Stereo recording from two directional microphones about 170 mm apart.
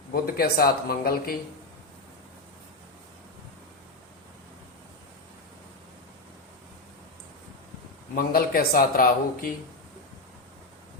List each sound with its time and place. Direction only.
0.1 s speech: 60° left (ahead or behind)
8.1 s speech: 60° left (ahead or behind)